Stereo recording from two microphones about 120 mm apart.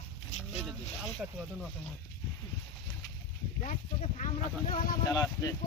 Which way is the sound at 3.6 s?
80° left.